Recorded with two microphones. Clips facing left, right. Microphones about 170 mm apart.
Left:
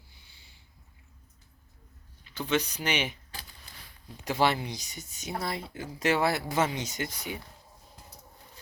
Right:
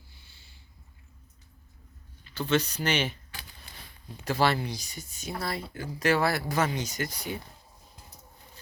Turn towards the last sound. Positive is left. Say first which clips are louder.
# right 2 dB
turn(degrees=20)  # may be behind; listen again after turning